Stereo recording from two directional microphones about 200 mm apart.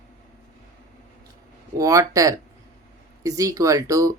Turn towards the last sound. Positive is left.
turn(degrees=-15)  # may be behind; listen again after turning